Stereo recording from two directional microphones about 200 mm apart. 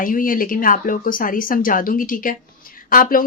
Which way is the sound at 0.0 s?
45° left (ahead or behind).